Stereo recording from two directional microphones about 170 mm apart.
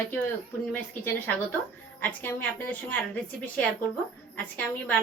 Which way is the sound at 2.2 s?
10° left (ahead or behind).